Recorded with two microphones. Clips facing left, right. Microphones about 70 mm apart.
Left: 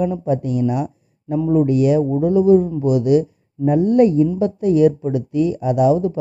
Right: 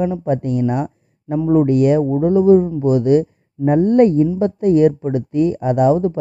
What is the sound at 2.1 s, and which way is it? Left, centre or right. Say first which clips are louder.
Speech: right 2 dB; right.